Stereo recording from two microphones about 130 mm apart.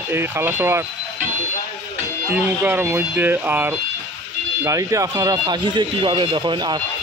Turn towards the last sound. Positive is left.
turn(degrees=-40)  # may be behind; listen again after turning